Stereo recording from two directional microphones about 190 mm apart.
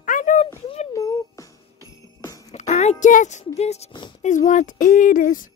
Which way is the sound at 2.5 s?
35° left (ahead or behind).